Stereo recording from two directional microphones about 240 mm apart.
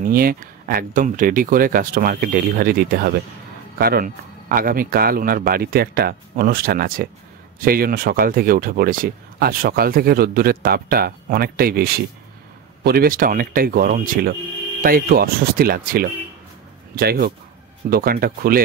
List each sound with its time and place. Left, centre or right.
0.0 s speech: right